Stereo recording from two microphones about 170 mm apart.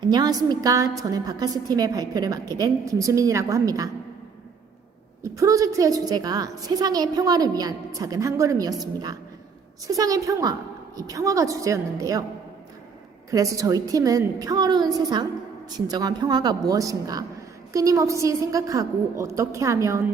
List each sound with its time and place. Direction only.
0.0 s a woman's voice: 25° right (ahead or behind)
5.2 s a woman's voice: 20° right (ahead or behind)
9.8 s a woman's voice: 20° right (ahead or behind)
13.3 s a woman's voice: 20° right (ahead or behind)